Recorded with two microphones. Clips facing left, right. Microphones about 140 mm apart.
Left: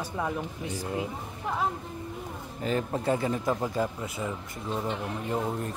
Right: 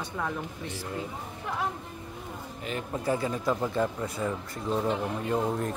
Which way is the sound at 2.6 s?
35° left (ahead or behind).